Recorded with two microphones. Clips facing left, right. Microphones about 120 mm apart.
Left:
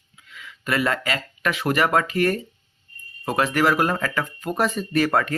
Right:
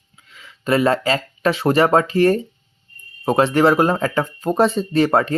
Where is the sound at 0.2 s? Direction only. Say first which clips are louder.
Left 1 dB; 35° right (ahead or behind).